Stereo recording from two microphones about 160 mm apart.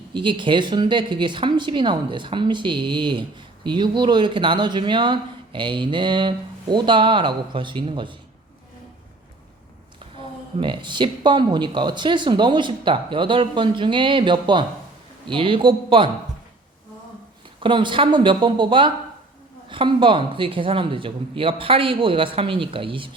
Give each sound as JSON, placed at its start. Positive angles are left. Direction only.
{"t": 0.1, "sound": "speech", "side_deg": -30}
{"t": 10.6, "sound": "speech", "side_deg": -30}
{"t": 17.6, "sound": "speech", "side_deg": -30}